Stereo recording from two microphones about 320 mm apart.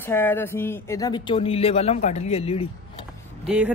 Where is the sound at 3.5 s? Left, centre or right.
Centre.